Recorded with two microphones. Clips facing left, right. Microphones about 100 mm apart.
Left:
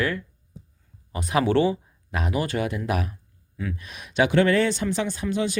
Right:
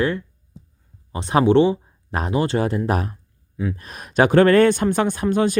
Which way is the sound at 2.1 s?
35° right (ahead or behind).